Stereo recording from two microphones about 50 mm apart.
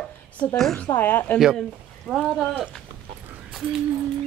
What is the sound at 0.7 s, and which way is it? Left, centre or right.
Speech, left.